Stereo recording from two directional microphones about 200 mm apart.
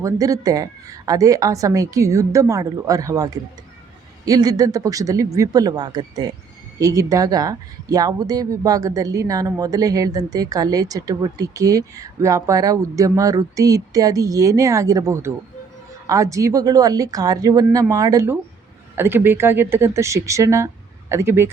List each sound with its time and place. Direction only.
0.0 s speech: 15° right (ahead or behind)